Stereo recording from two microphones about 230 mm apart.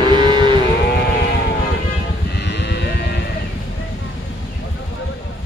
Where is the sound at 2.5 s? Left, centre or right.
Left.